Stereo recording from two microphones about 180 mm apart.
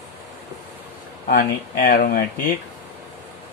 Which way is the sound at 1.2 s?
50° left (ahead or behind).